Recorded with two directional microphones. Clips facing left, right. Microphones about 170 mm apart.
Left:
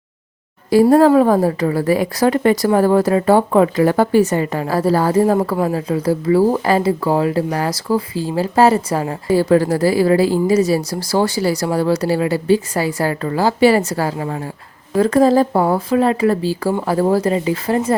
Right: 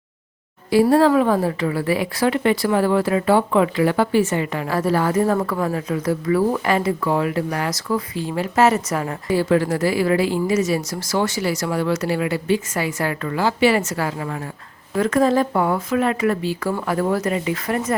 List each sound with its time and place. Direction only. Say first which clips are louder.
0.7 s speech: left 4 dB; 40° left (ahead or behind)